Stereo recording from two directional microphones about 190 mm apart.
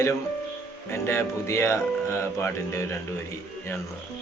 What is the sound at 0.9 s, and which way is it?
Mantra, 15° left (ahead or behind).